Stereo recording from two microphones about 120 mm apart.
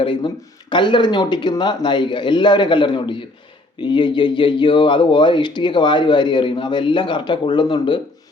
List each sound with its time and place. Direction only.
0.0 s speech: 45° left (ahead or behind)